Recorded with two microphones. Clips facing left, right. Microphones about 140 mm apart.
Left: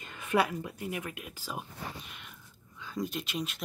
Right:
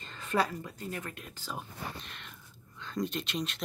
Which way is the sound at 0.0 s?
10° left (ahead or behind).